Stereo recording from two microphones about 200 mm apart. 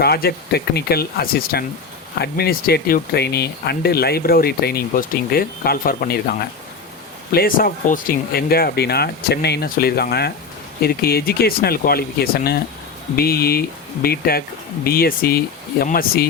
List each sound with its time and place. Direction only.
0.0 s speech: 50° left (ahead or behind)
7.3 s speech: 45° left (ahead or behind)